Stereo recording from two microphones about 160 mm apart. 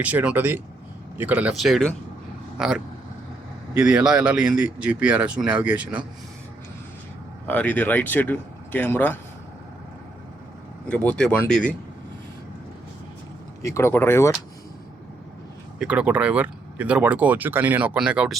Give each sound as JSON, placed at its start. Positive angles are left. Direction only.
{"t": 0.0, "sound": "speech", "side_deg": -10}
{"t": 7.4, "sound": "speech", "side_deg": 10}
{"t": 10.8, "sound": "speech", "side_deg": 10}
{"t": 13.6, "sound": "speech", "side_deg": 20}
{"t": 15.8, "sound": "speech", "side_deg": -5}